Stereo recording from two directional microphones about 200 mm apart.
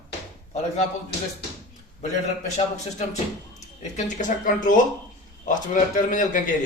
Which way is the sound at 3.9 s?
40° left (ahead or behind).